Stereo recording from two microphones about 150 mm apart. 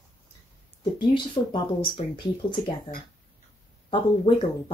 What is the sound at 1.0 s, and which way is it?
Speech, 30° left (ahead or behind).